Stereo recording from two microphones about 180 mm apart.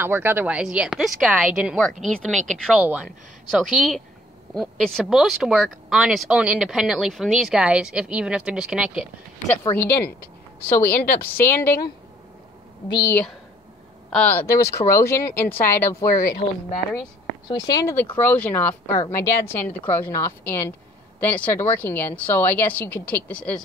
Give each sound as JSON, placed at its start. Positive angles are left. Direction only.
{"t": 0.0, "sound": "speech", "side_deg": -10}
{"t": 9.6, "sound": "speech", "side_deg": 15}
{"t": 12.9, "sound": "speech", "side_deg": 15}
{"t": 17.5, "sound": "speech", "side_deg": 20}